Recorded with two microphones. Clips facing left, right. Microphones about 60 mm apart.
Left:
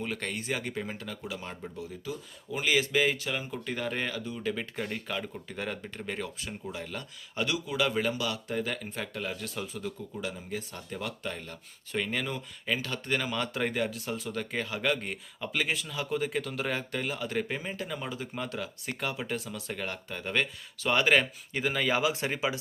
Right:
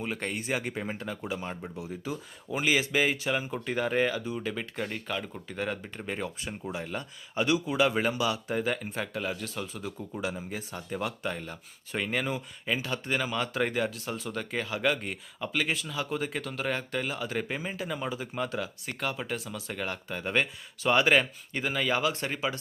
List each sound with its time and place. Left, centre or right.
0.0 s speech: centre
1.5 s speech: centre
4.4 s speech: centre
9.8 s speech: centre